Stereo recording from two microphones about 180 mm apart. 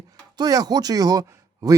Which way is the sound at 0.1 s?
20° right (ahead or behind).